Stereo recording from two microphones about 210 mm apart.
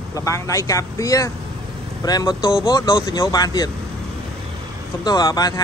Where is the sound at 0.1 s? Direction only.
15° left (ahead or behind).